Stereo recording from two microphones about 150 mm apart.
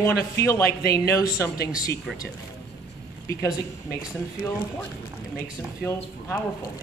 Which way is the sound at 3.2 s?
25° left (ahead or behind).